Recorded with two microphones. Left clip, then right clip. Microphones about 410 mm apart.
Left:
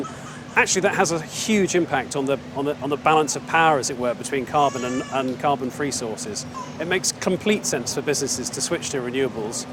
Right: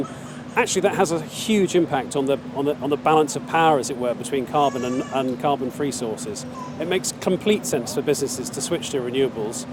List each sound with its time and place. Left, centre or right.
0.5 s speech: left